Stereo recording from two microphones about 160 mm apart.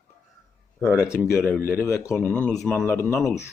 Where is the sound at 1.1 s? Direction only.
15° left (ahead or behind).